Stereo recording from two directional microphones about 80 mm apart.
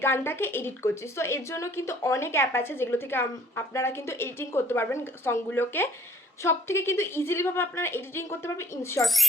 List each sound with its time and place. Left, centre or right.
0.0 s a woman's voice: left